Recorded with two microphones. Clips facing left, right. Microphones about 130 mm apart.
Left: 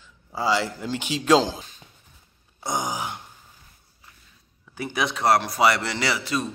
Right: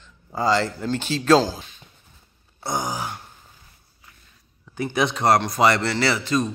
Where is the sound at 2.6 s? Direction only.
15° left (ahead or behind).